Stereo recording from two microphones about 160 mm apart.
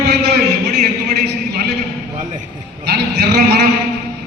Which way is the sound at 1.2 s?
75° right (ahead or behind).